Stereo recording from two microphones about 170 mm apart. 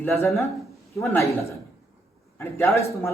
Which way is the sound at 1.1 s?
15° left (ahead or behind).